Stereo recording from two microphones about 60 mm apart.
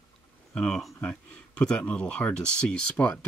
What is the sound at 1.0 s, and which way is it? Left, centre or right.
Speech, centre.